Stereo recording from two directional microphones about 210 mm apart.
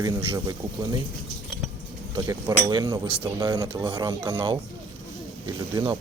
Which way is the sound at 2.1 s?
15° right (ahead or behind).